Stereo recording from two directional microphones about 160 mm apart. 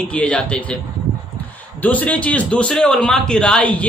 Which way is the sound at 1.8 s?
10° left (ahead or behind).